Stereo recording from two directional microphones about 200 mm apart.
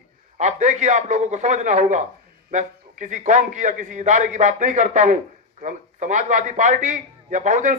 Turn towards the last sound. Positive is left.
turn(degrees=-40)  # may be behind; listen again after turning